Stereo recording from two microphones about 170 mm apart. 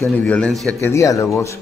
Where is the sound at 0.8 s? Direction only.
20° left (ahead or behind).